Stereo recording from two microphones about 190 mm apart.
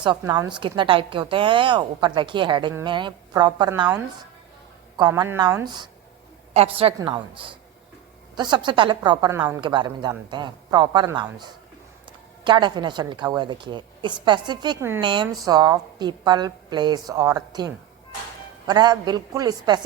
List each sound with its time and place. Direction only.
0.0 s a woman's voice: 20° right (ahead or behind)
4.9 s a woman's voice: 20° right (ahead or behind)
12.5 s a woman's voice: 25° right (ahead or behind)
14.8 s speech: 10° right (ahead or behind)
15.0 s a woman's voice: 25° right (ahead or behind)
18.7 s a woman's voice: 20° right (ahead or behind)